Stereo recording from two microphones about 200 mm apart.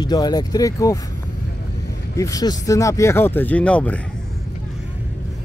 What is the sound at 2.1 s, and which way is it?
Speech, 15° left (ahead or behind).